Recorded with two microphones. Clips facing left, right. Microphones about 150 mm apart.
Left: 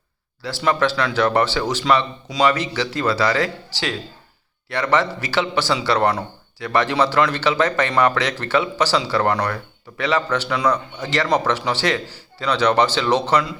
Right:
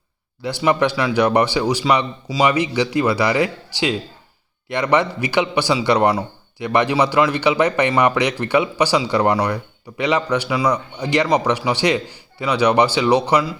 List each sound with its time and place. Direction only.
0.4 s a man's voice: 15° right (ahead or behind)